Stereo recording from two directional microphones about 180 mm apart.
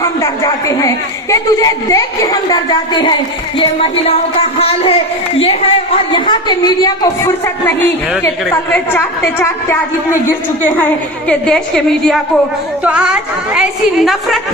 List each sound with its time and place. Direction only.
0.0 s a woman's voice: 15° left (ahead or behind)
3.6 s music: 30° left (ahead or behind)
5.4 s a woman's voice: 35° left (ahead or behind); by 14.4 s centre (ahead or behind)